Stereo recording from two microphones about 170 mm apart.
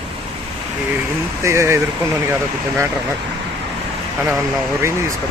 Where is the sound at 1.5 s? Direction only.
15° right (ahead or behind).